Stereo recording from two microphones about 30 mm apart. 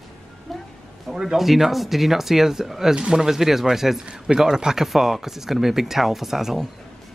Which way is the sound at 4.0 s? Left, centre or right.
Right.